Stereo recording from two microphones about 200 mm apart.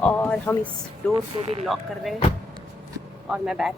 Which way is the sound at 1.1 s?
25° right (ahead or behind).